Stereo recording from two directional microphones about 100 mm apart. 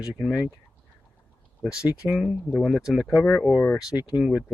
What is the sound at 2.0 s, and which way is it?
Speech, 5° right (ahead or behind).